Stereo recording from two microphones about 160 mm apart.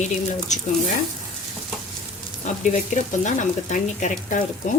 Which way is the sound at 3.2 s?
50° left (ahead or behind).